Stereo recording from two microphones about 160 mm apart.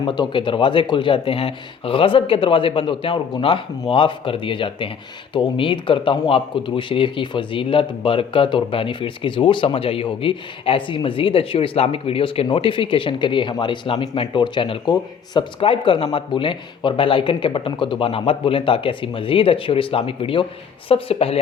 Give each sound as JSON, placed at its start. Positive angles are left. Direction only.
{"t": 0.0, "sound": "speech", "side_deg": 30}